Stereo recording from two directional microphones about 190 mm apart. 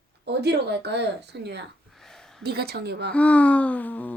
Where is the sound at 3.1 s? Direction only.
5° left (ahead or behind).